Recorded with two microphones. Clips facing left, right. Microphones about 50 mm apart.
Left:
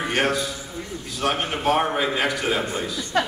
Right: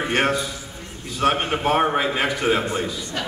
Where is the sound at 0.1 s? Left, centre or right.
Right.